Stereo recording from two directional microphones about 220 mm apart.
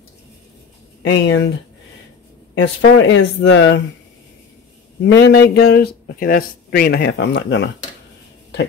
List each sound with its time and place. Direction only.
1.0 s speech: 55° left (ahead or behind)
2.5 s speech: 55° left (ahead or behind)
5.1 s speech: 50° left (ahead or behind)